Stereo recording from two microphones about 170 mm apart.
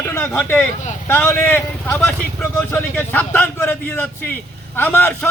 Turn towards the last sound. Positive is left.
turn(degrees=10)  # may be behind; listen again after turning